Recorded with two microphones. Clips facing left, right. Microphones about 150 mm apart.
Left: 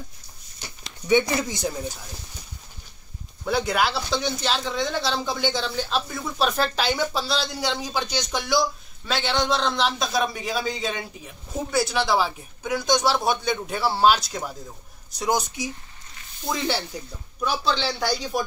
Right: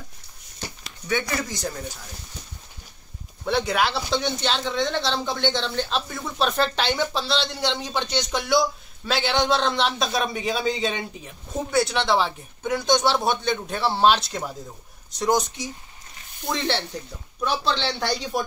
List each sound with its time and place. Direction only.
1.0 s speech: 20° left (ahead or behind)
3.4 s speech: centre (ahead or behind)